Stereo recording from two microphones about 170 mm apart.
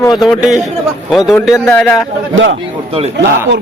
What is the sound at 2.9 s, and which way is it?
Speech, 35° right (ahead or behind).